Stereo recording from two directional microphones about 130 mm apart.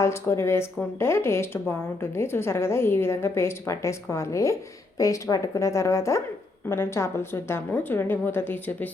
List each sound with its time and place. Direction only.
0.0 s a woman's voice: 20° left (ahead or behind)